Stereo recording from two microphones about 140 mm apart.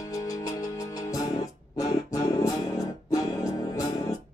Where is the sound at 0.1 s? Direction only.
25° left (ahead or behind).